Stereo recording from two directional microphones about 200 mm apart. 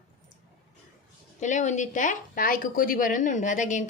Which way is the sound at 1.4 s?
35° left (ahead or behind).